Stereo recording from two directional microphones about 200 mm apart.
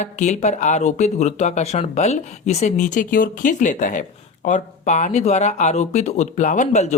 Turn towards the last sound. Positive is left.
turn(degrees=35)  # may be behind; listen again after turning